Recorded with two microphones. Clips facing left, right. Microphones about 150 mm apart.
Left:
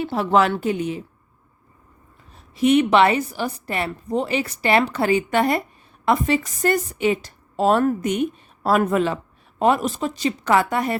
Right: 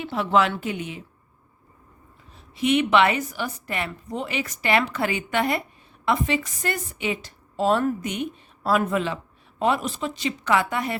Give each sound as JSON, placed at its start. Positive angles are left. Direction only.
{"t": 0.0, "sound": "a woman's voice", "side_deg": 40}
{"t": 2.3, "sound": "a woman's voice", "side_deg": 40}